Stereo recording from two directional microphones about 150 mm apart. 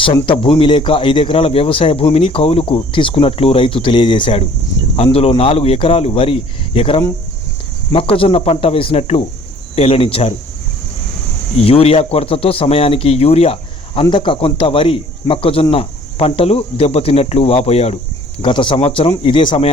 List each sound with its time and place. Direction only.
0.0 s speech: 35° left (ahead or behind)
11.5 s speech: 40° left (ahead or behind)